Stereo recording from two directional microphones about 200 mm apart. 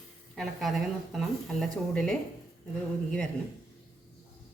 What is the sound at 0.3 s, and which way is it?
Speech, centre (ahead or behind).